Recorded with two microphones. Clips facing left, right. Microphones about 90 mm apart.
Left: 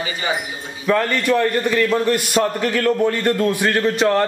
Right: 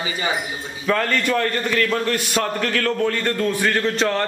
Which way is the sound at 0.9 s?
5° left (ahead or behind).